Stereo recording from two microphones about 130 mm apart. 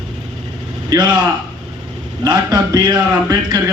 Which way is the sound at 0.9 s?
35° right (ahead or behind).